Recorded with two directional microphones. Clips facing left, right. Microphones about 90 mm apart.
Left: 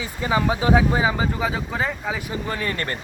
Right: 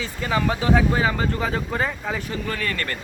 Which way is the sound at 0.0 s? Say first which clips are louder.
Left 1 dB; 15° left (ahead or behind).